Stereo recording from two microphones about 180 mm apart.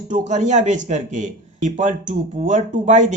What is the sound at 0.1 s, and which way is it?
Speech, 40° right (ahead or behind).